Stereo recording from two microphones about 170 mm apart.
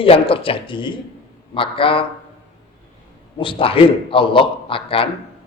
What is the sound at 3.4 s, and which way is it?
Speech, 30° left (ahead or behind).